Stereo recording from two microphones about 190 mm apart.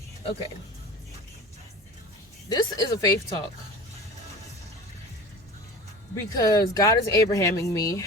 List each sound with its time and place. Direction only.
2.5 s speech: 20° left (ahead or behind)
6.3 s speech: 20° left (ahead or behind)